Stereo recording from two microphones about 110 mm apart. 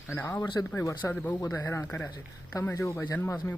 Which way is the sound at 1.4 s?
30° left (ahead or behind).